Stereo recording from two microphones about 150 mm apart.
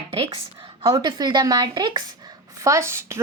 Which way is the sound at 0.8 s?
30° right (ahead or behind).